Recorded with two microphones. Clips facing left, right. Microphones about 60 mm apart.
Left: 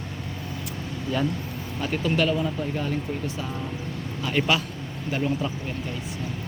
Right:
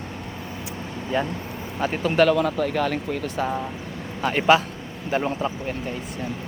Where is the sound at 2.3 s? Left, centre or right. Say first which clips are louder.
Right 5 dB; right.